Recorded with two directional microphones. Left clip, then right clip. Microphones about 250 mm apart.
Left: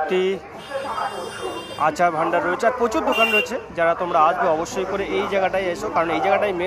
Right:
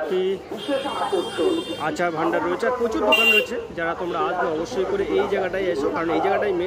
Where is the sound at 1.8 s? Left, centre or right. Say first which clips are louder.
Left 5 dB; centre.